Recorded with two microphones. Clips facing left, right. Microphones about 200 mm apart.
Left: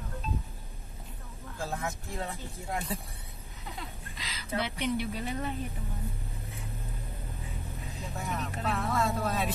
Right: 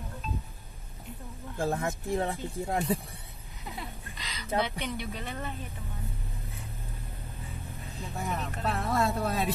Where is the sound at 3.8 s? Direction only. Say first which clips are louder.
Right 2 dB; centre (ahead or behind).